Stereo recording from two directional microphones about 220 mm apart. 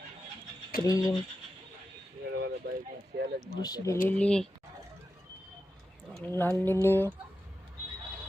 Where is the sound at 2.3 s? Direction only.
50° right (ahead or behind).